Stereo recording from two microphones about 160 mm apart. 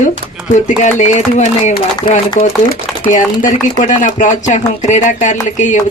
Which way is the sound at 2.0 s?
25° left (ahead or behind).